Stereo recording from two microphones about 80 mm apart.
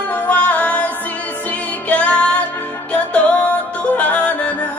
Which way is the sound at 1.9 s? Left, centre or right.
Centre.